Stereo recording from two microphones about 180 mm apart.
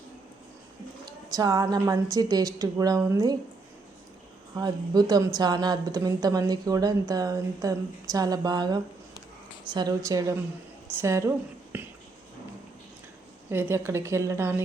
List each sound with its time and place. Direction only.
1.4 s a woman's voice: 20° right (ahead or behind)
4.5 s a woman's voice: 20° right (ahead or behind)
11.7 s a sound: 10° right (ahead or behind)
13.5 s a woman's voice: 10° right (ahead or behind)